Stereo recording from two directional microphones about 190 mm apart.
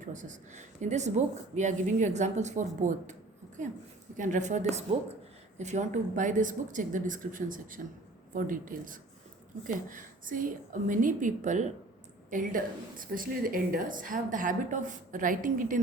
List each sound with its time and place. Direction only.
0.0 s speech: 40° right (ahead or behind)
4.2 s a woman's voice: 40° right (ahead or behind)